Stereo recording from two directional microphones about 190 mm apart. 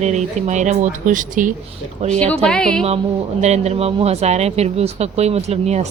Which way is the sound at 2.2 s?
5° left (ahead or behind).